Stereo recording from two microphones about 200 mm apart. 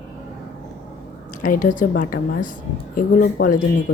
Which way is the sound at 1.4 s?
40° left (ahead or behind).